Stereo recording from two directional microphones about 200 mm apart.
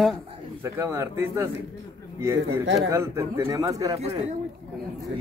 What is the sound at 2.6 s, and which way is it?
Speech, 60° right (ahead or behind).